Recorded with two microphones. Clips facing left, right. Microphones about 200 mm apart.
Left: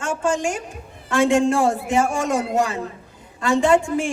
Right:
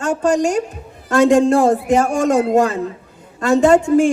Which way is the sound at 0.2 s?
40° right (ahead or behind).